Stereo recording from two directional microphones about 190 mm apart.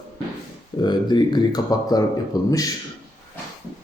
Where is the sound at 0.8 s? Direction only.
20° left (ahead or behind).